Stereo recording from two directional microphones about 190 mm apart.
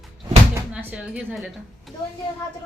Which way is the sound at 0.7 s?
5° right (ahead or behind).